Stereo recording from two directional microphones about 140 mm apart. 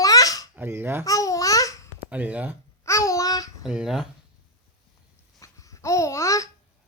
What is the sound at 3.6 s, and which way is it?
Speech, 5° right (ahead or behind).